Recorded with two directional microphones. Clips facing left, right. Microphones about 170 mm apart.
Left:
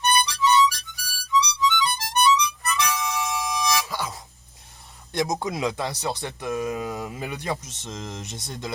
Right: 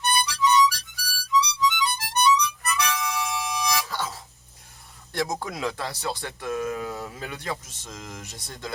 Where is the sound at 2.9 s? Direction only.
20° left (ahead or behind).